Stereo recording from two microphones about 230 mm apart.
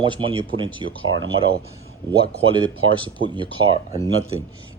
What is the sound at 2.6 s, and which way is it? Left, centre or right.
Speech, right.